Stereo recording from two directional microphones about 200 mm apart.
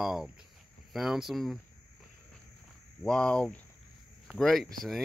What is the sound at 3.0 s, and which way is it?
Speech, 5° left (ahead or behind).